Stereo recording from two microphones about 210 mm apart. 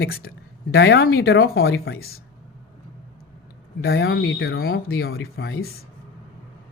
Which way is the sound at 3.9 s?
60° left (ahead or behind).